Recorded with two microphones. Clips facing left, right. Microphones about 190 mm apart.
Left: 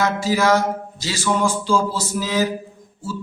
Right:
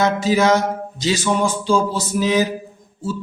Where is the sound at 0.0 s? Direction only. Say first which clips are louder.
Right 3 dB; 20° right (ahead or behind).